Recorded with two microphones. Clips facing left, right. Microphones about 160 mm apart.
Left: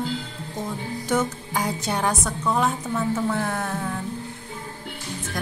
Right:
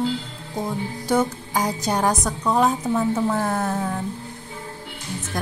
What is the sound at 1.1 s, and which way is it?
Speech, 35° right (ahead or behind).